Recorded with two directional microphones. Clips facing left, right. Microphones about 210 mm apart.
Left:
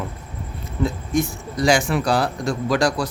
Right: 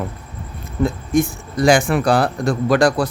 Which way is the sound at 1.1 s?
55° right (ahead or behind).